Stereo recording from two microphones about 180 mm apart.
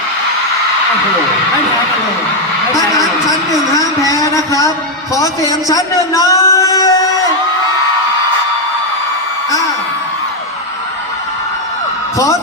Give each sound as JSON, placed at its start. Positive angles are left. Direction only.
{"t": 3.2, "sound": "a man's voice", "side_deg": 20}
{"t": 12.1, "sound": "speech", "side_deg": 15}